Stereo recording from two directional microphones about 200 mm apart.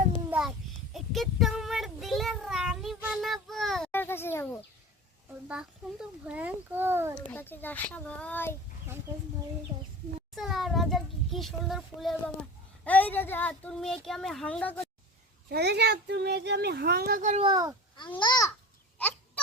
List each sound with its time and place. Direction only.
0.3 s child singing: 5° right (ahead or behind); by 4.4 s 10° left (ahead or behind)
5.5 s a child's voice: 5° right (ahead or behind)
7.2 s speech: 10° left (ahead or behind)
10.3 s a child's voice: centre (ahead or behind)
15.4 s a child's voice: 55° right (ahead or behind); by 17.4 s 40° right (ahead or behind)
17.4 s speech: 20° right (ahead or behind)
18.2 s a child's voice: 20° left (ahead or behind)